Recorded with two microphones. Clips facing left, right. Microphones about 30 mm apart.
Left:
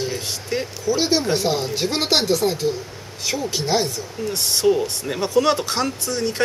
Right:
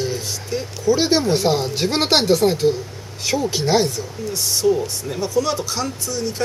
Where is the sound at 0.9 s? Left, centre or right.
Centre.